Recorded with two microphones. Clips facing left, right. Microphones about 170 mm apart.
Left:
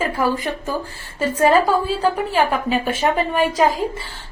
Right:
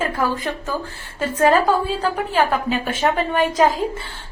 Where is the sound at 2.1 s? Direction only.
5° left (ahead or behind).